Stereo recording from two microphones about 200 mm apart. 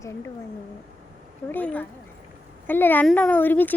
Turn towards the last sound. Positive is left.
turn(degrees=10)  # may be behind; listen again after turning